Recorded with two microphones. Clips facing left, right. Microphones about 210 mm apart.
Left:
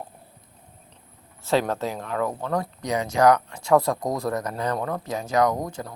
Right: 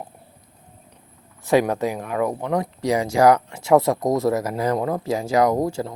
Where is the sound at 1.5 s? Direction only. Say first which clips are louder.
Right 5 dB; 15° right (ahead or behind).